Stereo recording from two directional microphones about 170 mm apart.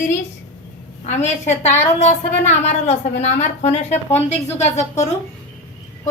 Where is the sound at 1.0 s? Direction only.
45° left (ahead or behind).